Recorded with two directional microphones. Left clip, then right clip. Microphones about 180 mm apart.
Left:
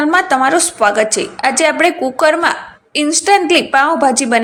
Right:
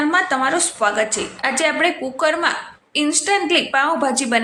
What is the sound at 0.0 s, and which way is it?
A woman's voice, 30° left (ahead or behind).